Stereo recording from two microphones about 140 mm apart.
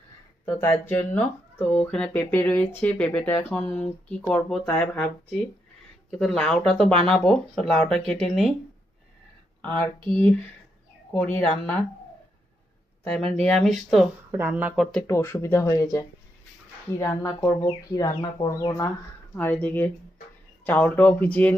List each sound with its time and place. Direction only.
0.4 s speech: 15° left (ahead or behind)
9.6 s speech: 15° left (ahead or behind)
13.1 s speech: 5° left (ahead or behind)
14.3 s speech: 15° right (ahead or behind)
15.0 s speech: 20° left (ahead or behind)
19.4 s speech: 10° left (ahead or behind)